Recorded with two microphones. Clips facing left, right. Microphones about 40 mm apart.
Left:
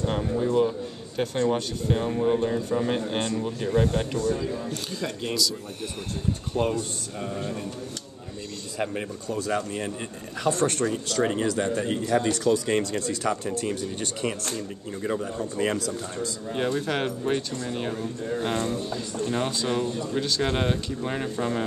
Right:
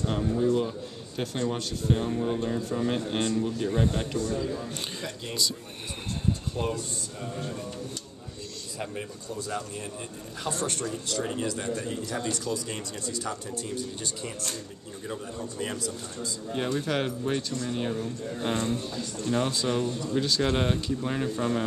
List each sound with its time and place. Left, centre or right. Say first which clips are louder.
0.0 s a man's voice: even; centre
6.5 s speech: left 5 dB; left
9.3 s speech: left 7 dB; left
11.2 s speech: left 7 dB; left
12.4 s speech: left 10 dB; left
15.6 s speech: left 7 dB; left
16.5 s a man's voice: left 2 dB; centre